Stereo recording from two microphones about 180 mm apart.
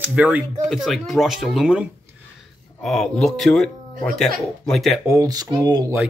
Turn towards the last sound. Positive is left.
turn(degrees=-20)  # may be behind; listen again after turning